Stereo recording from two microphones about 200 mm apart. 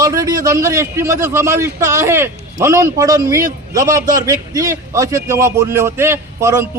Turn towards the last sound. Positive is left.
turn(degrees=-15)  # may be behind; listen again after turning